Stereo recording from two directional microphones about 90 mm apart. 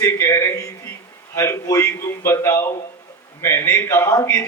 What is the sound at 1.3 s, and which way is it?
A man's voice, 30° left (ahead or behind).